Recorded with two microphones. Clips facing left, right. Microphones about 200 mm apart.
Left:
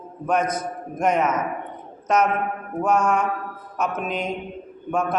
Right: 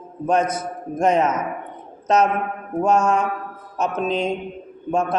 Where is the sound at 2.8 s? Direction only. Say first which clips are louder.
Right 2 dB; 25° right (ahead or behind).